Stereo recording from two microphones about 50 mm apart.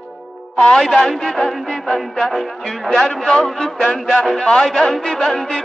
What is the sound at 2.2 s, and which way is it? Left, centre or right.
Speech, centre.